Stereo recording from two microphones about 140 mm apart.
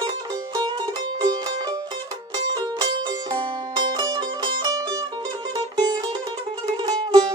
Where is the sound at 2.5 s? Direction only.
30° right (ahead or behind).